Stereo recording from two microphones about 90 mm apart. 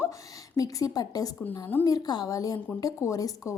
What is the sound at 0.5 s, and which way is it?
A woman's voice, 40° left (ahead or behind).